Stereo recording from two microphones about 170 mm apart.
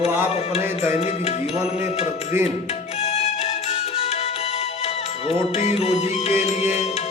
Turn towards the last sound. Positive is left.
turn(degrees=40)  # may be behind; listen again after turning